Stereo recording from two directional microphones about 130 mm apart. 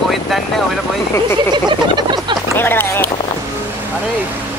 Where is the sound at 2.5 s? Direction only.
15° left (ahead or behind).